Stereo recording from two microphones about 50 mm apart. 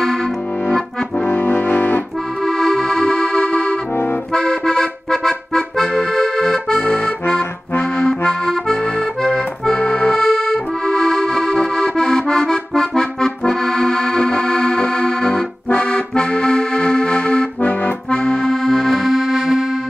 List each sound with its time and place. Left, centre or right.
1.2 s brass instrument: left
2.4 s music: centre
4.3 s accordion: centre
7.2 s accordion: left
8.3 s accordion: centre
10.1 s accordion: centre
17.6 s accordion: left
18.1 s accordion: centre